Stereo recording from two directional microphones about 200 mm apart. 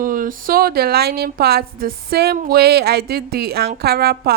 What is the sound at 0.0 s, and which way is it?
A woman's voice, 45° right (ahead or behind).